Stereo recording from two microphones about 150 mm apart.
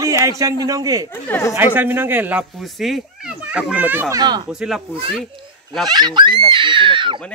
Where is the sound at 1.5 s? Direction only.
15° right (ahead or behind).